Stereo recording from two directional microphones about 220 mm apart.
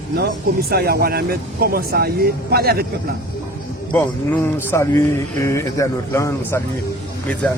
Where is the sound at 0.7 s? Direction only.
45° right (ahead or behind).